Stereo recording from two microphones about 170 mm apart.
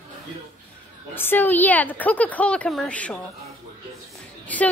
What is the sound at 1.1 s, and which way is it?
A woman's voice, 10° left (ahead or behind).